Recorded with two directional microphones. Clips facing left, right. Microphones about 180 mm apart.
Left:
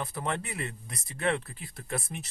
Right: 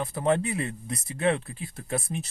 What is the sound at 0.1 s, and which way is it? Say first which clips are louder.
Speech: right 9 dB; 20° right (ahead or behind).